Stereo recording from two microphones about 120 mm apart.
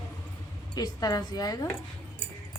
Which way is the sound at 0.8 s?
30° left (ahead or behind).